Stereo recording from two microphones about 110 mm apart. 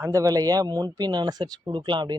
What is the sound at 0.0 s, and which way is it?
A man's voice, 30° right (ahead or behind).